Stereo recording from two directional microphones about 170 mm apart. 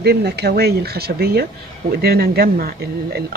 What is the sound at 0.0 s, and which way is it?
Speech, 75° right (ahead or behind).